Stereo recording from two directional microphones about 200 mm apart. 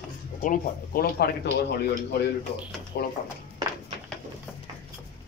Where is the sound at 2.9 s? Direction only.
50° left (ahead or behind).